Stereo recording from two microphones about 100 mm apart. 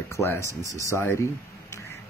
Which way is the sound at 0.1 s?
25° left (ahead or behind).